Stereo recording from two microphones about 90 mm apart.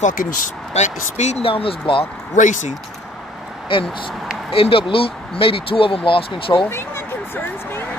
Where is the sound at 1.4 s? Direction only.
85° left.